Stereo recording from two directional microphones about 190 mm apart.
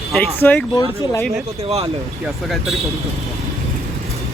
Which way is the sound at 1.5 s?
30° right (ahead or behind).